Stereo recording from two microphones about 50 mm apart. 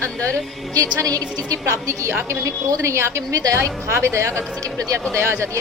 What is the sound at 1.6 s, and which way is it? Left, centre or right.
A woman's voice, right.